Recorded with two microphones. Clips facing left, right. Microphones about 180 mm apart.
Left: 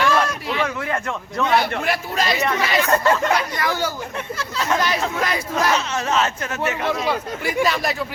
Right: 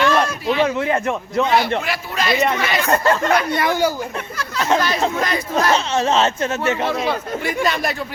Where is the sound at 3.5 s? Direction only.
25° right (ahead or behind).